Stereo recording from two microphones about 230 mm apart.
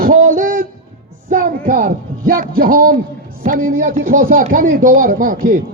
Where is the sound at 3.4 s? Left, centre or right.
Right.